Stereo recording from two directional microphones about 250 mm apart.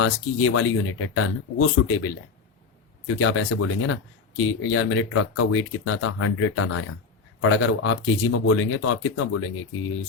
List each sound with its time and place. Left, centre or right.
0.0 s speech: left
3.2 s speech: left